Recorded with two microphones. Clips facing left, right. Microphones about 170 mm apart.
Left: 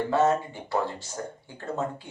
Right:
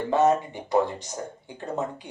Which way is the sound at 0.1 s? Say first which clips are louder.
Right 4 dB; 15° right (ahead or behind).